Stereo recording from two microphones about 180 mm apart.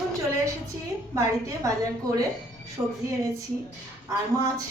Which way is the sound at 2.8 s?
10° right (ahead or behind).